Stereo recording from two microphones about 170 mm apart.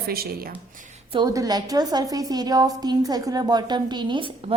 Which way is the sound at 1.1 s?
25° right (ahead or behind).